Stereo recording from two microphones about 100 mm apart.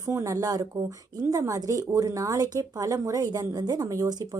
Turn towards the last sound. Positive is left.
turn(degrees=-40)  # may be behind; listen again after turning